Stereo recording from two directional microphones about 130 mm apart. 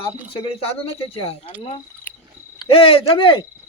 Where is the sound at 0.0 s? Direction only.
45° left (ahead or behind).